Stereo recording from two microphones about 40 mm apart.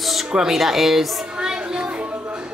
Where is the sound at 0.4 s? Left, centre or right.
Centre.